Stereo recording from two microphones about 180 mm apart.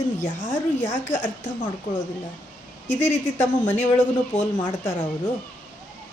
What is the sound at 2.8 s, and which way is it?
A woman's voice, 40° left (ahead or behind).